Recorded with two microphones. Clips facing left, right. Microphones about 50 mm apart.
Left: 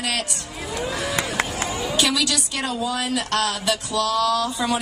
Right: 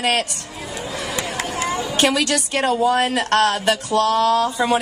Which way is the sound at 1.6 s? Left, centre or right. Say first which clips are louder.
Right 7 dB; right.